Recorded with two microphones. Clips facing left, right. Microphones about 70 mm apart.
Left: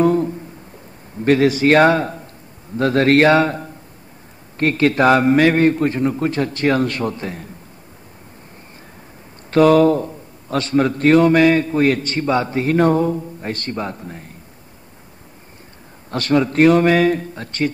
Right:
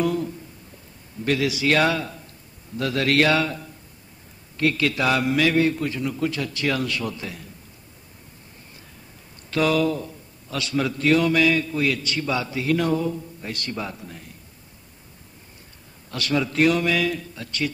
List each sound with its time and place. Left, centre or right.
0.0 s a sound: left
1.2 s a man's voice: left
9.5 s a man's voice: left
16.1 s a man's voice: left